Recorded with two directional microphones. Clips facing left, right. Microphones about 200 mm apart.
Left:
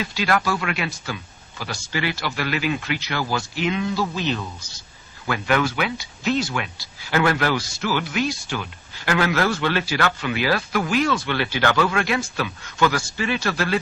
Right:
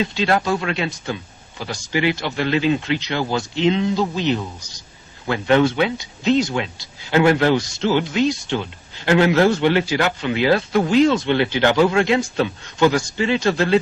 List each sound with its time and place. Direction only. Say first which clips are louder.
0.0 s speech: right 3 dB; 25° right (ahead or behind)